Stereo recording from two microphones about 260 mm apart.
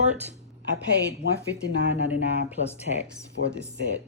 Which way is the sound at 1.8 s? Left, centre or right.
Right.